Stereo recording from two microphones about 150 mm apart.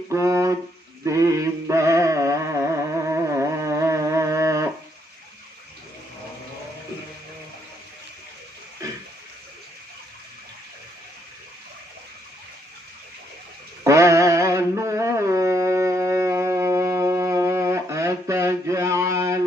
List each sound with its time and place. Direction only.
0.1 s a sound: 20° right (ahead or behind)
1.0 s music: 20° right (ahead or behind)
13.8 s mantra: 20° right (ahead or behind)